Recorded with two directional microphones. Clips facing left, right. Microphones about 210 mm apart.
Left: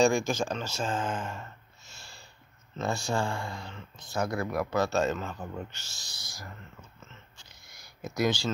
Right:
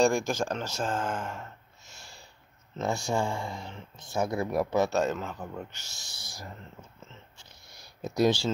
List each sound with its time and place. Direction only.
0.0 s speech: 10° right (ahead or behind)
2.8 s speech: 20° right (ahead or behind)
5.4 s speech: 5° right (ahead or behind)
5.9 s speech: 30° right (ahead or behind)
7.7 s a sound: 30° right (ahead or behind)